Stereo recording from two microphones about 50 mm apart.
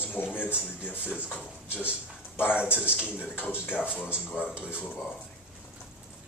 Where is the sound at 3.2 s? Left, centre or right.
Left.